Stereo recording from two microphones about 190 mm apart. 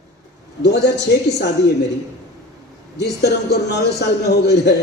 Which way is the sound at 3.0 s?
60° left (ahead or behind).